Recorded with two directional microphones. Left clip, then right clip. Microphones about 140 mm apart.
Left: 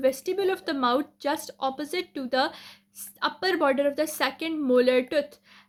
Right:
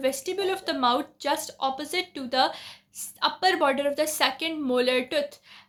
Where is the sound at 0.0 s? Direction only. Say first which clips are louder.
Left 2 dB; 40° left (ahead or behind).